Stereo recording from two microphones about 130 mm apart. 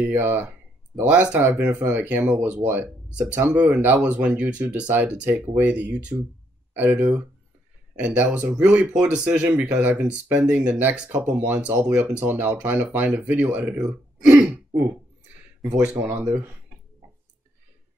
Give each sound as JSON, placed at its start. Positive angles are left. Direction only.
{"t": 0.0, "sound": "speech", "side_deg": -15}
{"t": 15.6, "sound": "speech", "side_deg": -15}